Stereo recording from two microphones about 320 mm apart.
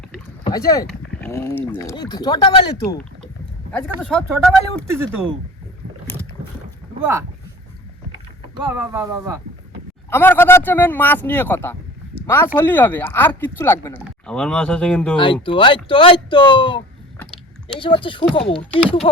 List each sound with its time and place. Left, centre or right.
0.4 s speech: centre
3.7 s speech: centre
7.0 s speech: centre
8.7 s speech: centre
10.1 s speech: centre
15.2 s speech: centre